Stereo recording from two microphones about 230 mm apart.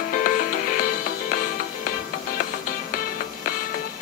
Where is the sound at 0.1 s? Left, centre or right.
Left.